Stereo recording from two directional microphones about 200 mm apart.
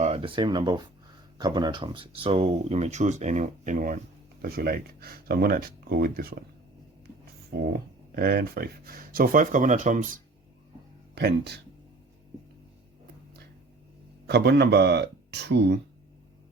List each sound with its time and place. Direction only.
0.0 s speech: 30° right (ahead or behind); by 6.4 s 50° right (ahead or behind)
7.5 s speech: 55° right (ahead or behind); by 10.1 s 40° right (ahead or behind)
11.1 s speech: 55° right (ahead or behind)
14.3 s speech: 55° right (ahead or behind)